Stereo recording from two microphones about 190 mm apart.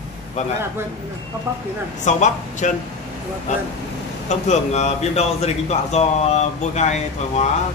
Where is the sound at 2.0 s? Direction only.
40° left (ahead or behind).